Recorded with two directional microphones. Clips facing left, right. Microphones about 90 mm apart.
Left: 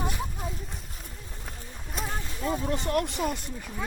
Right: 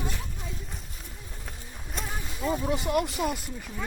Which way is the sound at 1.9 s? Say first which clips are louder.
Left 1 dB; centre (ahead or behind).